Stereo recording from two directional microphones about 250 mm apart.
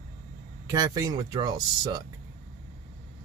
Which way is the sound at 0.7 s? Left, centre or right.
Centre.